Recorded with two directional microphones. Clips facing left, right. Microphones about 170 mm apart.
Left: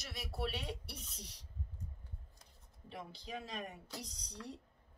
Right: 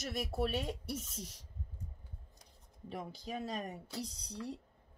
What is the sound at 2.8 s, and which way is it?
Speech, 45° right (ahead or behind).